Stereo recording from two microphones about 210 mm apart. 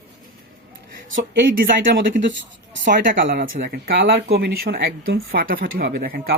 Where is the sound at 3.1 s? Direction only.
45° right (ahead or behind).